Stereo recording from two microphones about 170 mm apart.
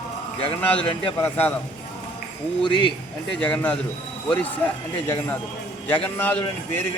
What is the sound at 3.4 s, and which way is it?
A man's voice, 5° left (ahead or behind).